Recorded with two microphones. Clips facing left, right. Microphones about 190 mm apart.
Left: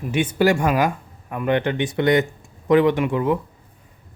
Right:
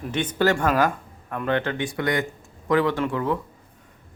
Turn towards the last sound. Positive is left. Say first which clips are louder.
# left 5 dB
turn(degrees=15)  # may be behind; listen again after turning